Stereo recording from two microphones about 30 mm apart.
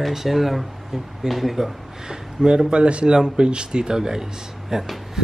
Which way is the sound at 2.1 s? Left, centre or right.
Right.